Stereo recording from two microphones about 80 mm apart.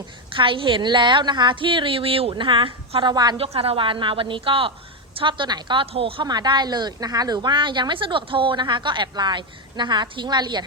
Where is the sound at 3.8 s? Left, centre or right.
Right.